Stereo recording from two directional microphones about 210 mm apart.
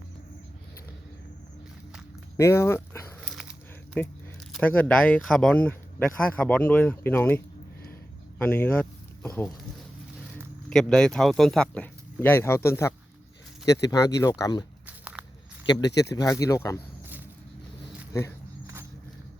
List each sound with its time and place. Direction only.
2.4 s dog: 10° left (ahead or behind)
4.0 s speech: 5° left (ahead or behind)
10.7 s speech: centre (ahead or behind)
14.8 s walk: 5° right (ahead or behind)
15.6 s speech: 20° left (ahead or behind)
18.1 s speech: 10° left (ahead or behind)